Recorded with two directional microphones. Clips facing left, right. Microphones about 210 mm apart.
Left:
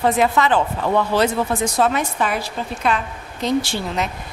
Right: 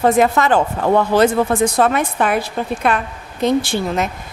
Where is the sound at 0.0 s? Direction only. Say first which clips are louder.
Right 3 dB; 45° right (ahead or behind).